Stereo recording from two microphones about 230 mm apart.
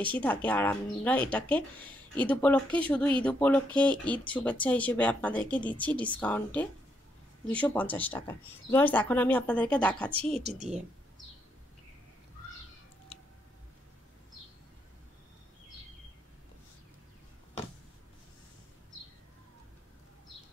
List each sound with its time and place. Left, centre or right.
0.0 s speech: centre
10.3 s a woman's voice: right